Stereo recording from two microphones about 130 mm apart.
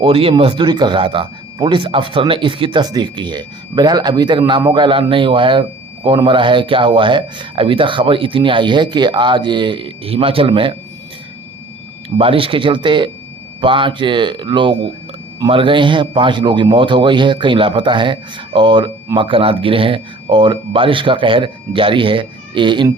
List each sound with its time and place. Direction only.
0.0 s speech: 45° right (ahead or behind)
12.1 s speech: 45° right (ahead or behind)